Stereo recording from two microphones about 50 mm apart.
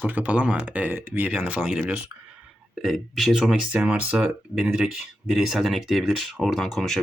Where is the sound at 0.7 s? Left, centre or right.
Right.